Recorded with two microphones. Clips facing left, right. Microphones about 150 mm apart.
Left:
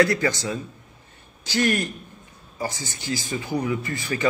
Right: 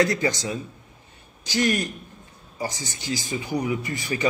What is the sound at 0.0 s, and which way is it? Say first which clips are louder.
A man's voice: left 2 dB; 20° right (ahead or behind).